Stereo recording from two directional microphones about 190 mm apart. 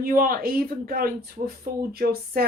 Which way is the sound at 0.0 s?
50° right (ahead or behind).